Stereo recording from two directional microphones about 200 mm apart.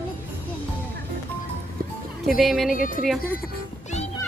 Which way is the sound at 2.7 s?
45° left (ahead or behind).